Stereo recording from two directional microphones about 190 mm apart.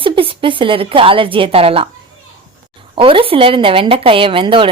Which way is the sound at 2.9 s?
30° right (ahead or behind).